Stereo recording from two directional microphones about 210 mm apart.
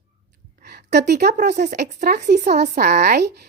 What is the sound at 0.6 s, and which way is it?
A woman's voice, 50° right (ahead or behind).